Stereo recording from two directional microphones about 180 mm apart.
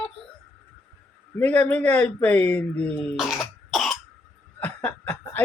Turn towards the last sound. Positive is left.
turn(degrees=10)  # may be behind; listen again after turning